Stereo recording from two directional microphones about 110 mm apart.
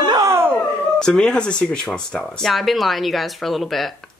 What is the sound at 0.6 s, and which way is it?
Speech, 10° left (ahead or behind).